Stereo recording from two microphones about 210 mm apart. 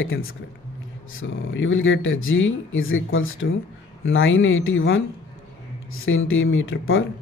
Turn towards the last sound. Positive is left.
turn(degrees=70)  # may be behind; listen again after turning